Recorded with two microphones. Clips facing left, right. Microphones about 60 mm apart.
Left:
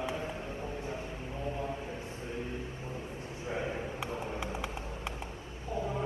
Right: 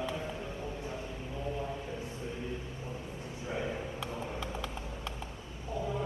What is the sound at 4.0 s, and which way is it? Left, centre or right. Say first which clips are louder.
Clip-clop: left 1 dB; left.